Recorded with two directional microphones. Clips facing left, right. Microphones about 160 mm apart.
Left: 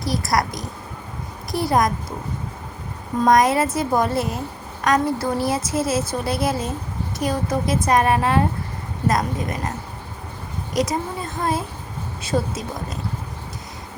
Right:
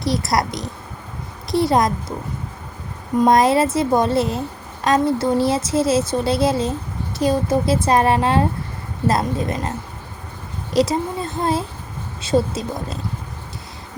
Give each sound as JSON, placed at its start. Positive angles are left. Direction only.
{"t": 0.0, "sound": "a woman's voice", "side_deg": -25}
{"t": 3.2, "sound": "a woman's voice", "side_deg": -25}
{"t": 10.8, "sound": "a woman's voice", "side_deg": -30}